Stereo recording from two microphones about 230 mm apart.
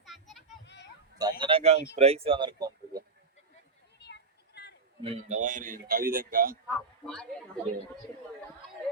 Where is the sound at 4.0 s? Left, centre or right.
Left.